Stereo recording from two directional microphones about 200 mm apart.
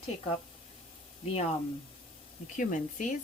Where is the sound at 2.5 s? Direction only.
40° left (ahead or behind).